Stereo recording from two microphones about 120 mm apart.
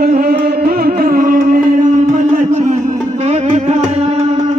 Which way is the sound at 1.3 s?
90° right.